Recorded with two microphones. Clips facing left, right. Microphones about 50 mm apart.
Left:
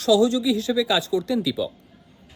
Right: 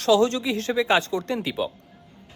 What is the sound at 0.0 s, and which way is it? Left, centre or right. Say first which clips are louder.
A man's voice: left 1 dB; right.